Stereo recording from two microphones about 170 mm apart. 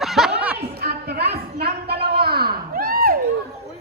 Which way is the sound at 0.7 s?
70° right (ahead or behind).